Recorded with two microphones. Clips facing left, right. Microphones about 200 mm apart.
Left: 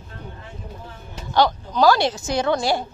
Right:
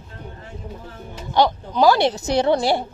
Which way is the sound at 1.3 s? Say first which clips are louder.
Right 1 dB; 20° right (ahead or behind).